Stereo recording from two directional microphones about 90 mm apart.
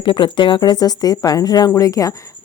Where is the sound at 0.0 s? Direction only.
65° left (ahead or behind).